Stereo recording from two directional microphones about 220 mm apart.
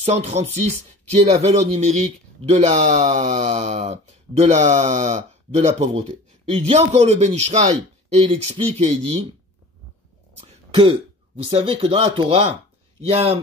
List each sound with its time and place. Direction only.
0.0 s speech: 30° right (ahead or behind)
10.7 s throat clearing: 25° right (ahead or behind)
11.4 s speech: 25° right (ahead or behind)